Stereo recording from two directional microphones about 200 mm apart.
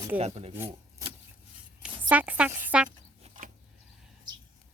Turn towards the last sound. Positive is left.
turn(degrees=-40)  # may be behind; listen again after turning